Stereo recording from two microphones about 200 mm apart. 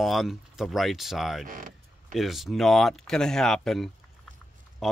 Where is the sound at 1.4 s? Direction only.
40° right (ahead or behind).